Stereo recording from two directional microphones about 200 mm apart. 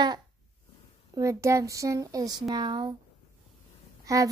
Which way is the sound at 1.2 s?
15° right (ahead or behind).